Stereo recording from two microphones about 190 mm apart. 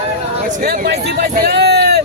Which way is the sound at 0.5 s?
50° right (ahead or behind).